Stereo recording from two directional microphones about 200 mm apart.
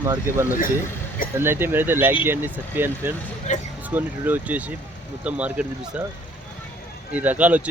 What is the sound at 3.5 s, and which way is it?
Speech, 35° left (ahead or behind).